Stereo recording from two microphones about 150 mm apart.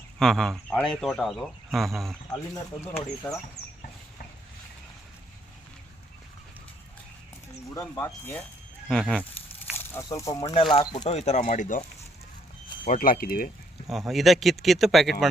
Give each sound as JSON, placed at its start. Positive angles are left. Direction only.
{"t": 0.2, "sound": "speech", "side_deg": 0}
{"t": 2.8, "sound": "speech", "side_deg": 15}
{"t": 7.8, "sound": "speech", "side_deg": 15}
{"t": 8.9, "sound": "speech", "side_deg": 5}
{"t": 10.0, "sound": "speech", "side_deg": 25}
{"t": 10.5, "sound": "speech", "side_deg": 35}
{"t": 12.8, "sound": "speech", "side_deg": 70}
{"t": 13.8, "sound": "speech", "side_deg": 0}